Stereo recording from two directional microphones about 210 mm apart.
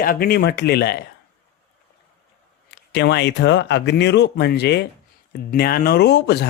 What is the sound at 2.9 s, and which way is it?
Speech, 55° left (ahead or behind).